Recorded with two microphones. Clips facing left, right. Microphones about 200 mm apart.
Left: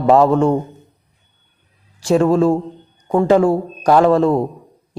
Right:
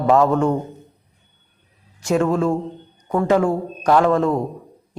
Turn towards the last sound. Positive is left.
turn(degrees=35)  # may be behind; listen again after turning